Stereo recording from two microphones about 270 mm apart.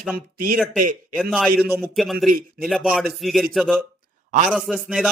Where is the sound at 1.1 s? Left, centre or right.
Centre.